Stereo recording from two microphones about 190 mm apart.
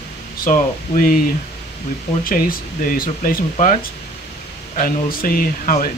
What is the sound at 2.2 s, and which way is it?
Speech, 50° left (ahead or behind).